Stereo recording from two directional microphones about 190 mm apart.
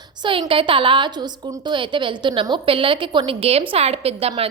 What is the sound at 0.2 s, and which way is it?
A woman's voice, 25° right (ahead or behind).